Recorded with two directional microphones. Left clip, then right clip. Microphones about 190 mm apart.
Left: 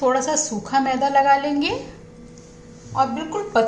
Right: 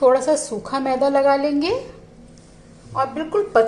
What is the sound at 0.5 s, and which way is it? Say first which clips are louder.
Speech: left 1 dB; 30° right (ahead or behind).